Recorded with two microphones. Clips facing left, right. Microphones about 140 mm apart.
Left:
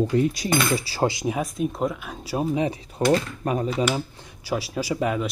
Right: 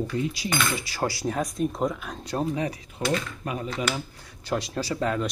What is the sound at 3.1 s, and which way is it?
Speech, 40° left (ahead or behind).